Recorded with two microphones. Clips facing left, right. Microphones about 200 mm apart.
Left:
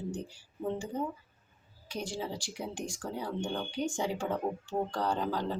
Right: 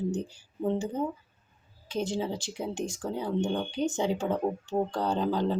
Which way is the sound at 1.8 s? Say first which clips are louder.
Right 6 dB; 20° right (ahead or behind).